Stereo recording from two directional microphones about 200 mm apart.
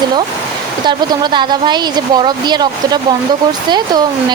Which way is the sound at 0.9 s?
25° right (ahead or behind).